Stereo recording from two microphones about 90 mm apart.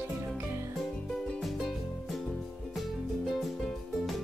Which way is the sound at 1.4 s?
Centre (ahead or behind).